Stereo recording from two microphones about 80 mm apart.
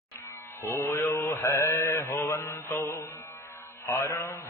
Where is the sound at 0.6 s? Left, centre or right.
Left.